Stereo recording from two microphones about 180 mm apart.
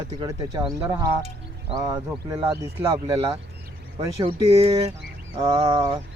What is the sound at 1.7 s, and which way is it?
Speech, 20° right (ahead or behind).